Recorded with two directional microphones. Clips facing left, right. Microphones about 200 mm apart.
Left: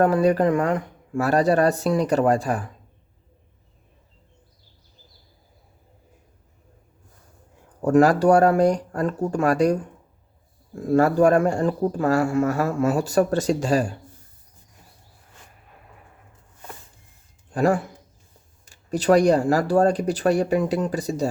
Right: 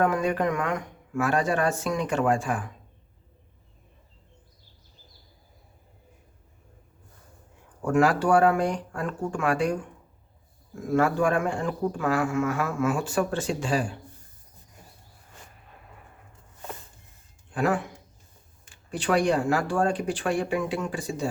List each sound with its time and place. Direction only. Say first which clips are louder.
0.0 s a man's voice: left 6 dB; 35° left (ahead or behind)
7.9 s a man's voice: left 6 dB; 40° left (ahead or behind)
10.8 s a man's voice: left 6 dB; 35° left (ahead or behind)
17.5 s a man's voice: left 5 dB; 40° left (ahead or behind)